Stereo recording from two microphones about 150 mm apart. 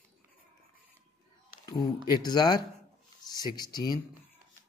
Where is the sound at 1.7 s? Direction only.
25° left (ahead or behind).